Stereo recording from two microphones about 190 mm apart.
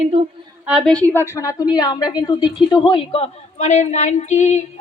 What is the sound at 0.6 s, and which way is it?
Speech, 5° right (ahead or behind).